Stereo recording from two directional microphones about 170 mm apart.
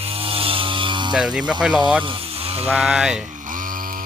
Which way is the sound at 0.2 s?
35° right (ahead or behind).